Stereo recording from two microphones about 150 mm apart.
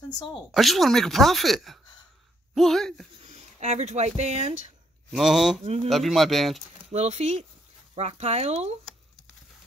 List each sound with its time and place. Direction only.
0.5 s speech: centre (ahead or behind)
3.3 s speech: 50° right (ahead or behind)
5.1 s speech: centre (ahead or behind)
5.6 s speech: 45° right (ahead or behind)
5.9 s speech: centre (ahead or behind)
6.9 s speech: 45° right (ahead or behind)